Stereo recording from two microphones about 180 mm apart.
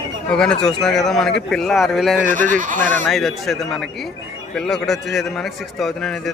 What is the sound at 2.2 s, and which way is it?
Speech, 50° right (ahead or behind).